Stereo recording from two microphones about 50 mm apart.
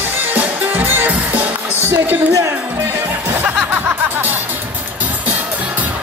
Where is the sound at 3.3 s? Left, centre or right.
Right.